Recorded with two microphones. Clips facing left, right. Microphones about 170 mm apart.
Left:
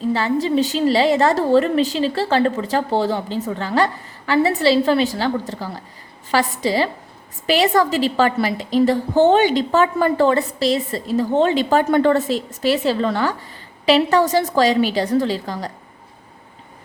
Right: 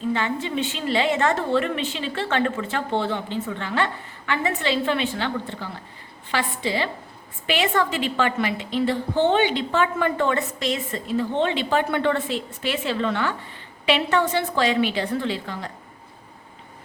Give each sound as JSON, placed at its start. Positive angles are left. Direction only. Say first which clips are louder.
{"t": 0.1, "sound": "a woman's voice", "louder": "left 8 dB", "side_deg": 35}